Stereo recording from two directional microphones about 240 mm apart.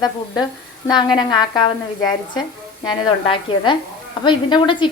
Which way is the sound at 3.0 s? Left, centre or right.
Centre.